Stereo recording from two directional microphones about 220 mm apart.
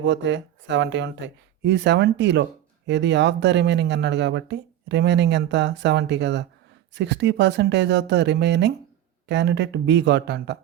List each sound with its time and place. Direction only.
0.0 s speech: 55° right (ahead or behind)